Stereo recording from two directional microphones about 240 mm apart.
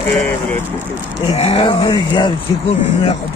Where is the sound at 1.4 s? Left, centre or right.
Left.